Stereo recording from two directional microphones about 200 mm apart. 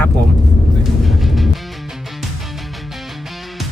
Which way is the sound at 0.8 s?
Centre (ahead or behind).